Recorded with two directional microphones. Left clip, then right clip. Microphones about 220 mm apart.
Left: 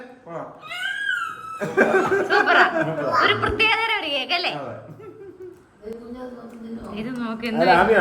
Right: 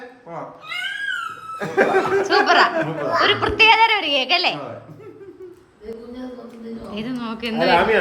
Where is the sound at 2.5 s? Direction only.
15° right (ahead or behind).